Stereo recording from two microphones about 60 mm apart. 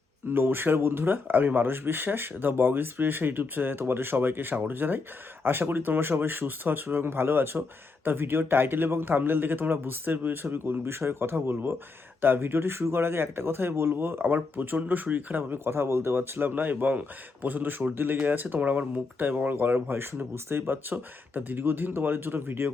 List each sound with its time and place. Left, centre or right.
0.3 s speech: right